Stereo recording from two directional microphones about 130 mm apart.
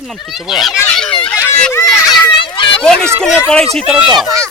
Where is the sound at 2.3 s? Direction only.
40° left (ahead or behind).